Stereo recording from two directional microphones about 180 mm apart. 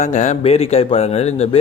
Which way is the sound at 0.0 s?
40° left (ahead or behind).